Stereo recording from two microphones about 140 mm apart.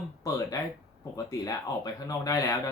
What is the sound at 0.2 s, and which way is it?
Speech, 25° left (ahead or behind).